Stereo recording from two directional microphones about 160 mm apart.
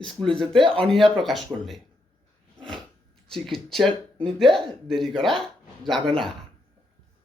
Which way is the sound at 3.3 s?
Centre (ahead or behind).